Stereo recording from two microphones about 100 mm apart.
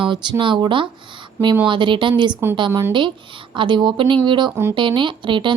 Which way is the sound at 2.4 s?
25° right (ahead or behind).